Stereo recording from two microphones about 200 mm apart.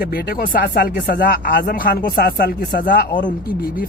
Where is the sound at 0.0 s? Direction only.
50° left (ahead or behind).